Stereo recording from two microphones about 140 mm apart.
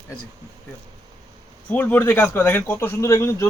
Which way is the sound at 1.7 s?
10° left (ahead or behind).